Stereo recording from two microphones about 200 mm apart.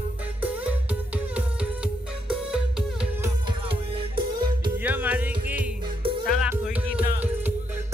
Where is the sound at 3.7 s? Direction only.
25° right (ahead or behind).